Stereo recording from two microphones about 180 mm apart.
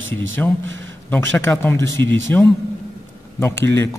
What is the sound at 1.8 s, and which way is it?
Speech, 90° right.